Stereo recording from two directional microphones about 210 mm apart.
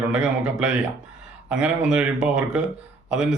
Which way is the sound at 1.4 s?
5° right (ahead or behind).